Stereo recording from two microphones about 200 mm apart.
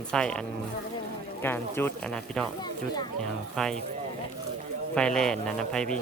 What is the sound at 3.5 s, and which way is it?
Speech, 5° left (ahead or behind).